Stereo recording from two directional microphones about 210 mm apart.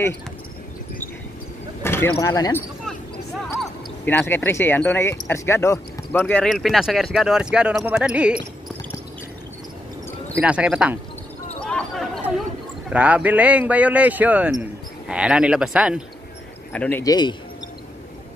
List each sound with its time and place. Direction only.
1.8 s speech: 10° left (ahead or behind)
4.0 s speech: 10° left (ahead or behind)
10.3 s speech: 5° right (ahead or behind)
11.6 s basketball bounce: 5° left (ahead or behind)
12.9 s speech: 5° right (ahead or behind)
16.7 s speech: 5° left (ahead or behind)
17.0 s speech: 20° left (ahead or behind)